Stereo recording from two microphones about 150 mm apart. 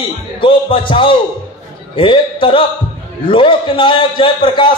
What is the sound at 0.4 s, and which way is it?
A man's voice, 35° left (ahead or behind).